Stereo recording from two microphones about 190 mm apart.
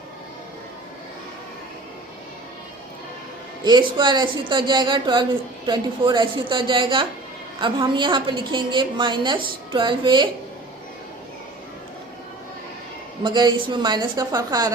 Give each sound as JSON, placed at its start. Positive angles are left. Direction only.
{"t": 3.6, "sound": "a woman's voice", "side_deg": -25}
{"t": 13.2, "sound": "a woman's voice", "side_deg": -25}